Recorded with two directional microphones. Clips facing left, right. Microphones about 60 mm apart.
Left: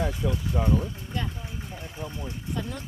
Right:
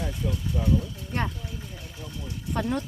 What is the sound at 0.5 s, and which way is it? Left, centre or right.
Speech, left.